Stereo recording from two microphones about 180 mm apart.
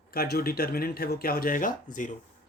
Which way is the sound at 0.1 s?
55° left (ahead or behind).